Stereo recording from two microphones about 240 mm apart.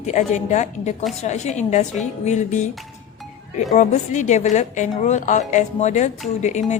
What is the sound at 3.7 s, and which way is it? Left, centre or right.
A woman's voice, left.